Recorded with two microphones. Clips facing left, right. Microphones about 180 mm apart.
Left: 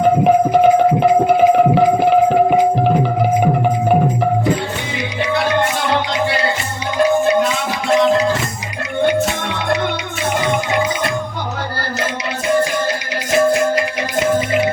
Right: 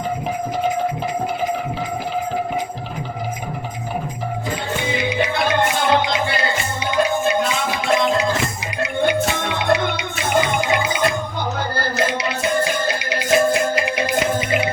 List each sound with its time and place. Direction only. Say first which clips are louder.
0.0 s music: left 12 dB; 65° left (ahead or behind)